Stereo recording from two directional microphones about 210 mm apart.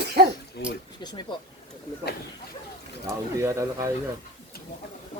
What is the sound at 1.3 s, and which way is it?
Speech, 20° left (ahead or behind).